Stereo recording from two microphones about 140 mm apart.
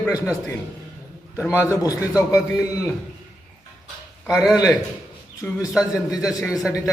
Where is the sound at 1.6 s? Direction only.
25° left (ahead or behind).